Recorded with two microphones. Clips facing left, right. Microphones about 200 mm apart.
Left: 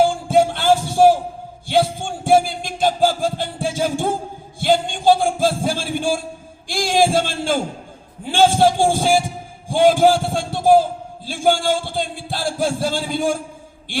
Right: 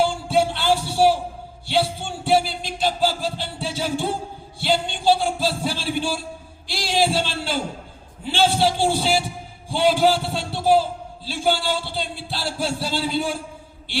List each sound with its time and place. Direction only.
0.0 s music: 45° left (ahead or behind)
4.6 s a sound: 45° left (ahead or behind)
11.3 s music: 50° left (ahead or behind)